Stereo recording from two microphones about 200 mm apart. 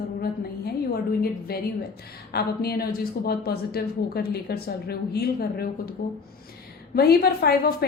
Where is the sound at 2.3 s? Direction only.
50° left (ahead or behind).